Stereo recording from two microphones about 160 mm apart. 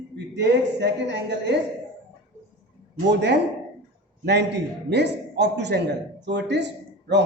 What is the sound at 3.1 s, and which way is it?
A man's voice, 90° right.